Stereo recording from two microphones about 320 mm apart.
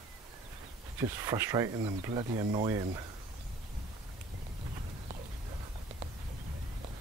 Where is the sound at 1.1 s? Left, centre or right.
Centre.